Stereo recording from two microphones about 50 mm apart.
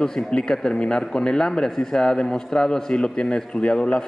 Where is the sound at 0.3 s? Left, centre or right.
Centre.